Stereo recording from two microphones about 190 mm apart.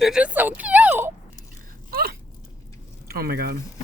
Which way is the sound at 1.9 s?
55° right (ahead or behind).